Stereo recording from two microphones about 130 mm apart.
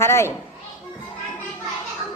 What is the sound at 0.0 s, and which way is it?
Children playing, 20° left (ahead or behind).